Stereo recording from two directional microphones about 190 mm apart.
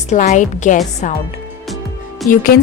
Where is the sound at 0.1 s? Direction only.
40° left (ahead or behind).